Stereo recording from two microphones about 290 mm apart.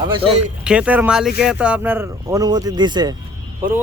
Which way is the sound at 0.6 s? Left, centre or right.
Centre.